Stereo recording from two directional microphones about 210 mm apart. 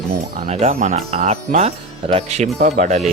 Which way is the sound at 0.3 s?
35° right (ahead or behind).